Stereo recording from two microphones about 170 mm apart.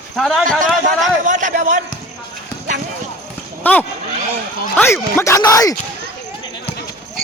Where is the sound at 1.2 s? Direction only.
45° right (ahead or behind).